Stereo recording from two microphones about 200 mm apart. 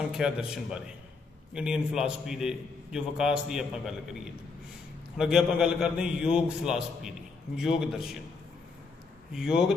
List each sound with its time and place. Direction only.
0.1 s a man's voice: 5° right (ahead or behind)
9.3 s a man's voice: 5° right (ahead or behind)